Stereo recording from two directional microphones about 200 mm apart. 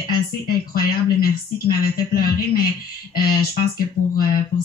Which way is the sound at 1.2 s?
45° left (ahead or behind).